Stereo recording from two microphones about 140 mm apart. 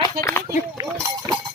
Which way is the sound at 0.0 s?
20° left (ahead or behind).